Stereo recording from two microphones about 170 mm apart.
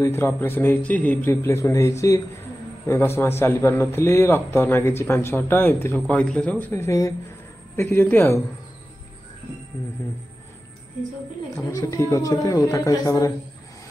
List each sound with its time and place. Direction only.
0.0 s a man's voice: 15° left (ahead or behind)
11.5 s speech: 15° left (ahead or behind)